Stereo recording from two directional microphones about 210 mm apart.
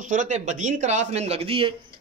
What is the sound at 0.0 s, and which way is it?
A man's voice, 35° right (ahead or behind).